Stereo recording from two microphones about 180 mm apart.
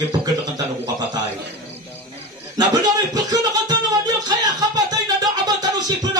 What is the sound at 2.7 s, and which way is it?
Speech, 20° right (ahead or behind).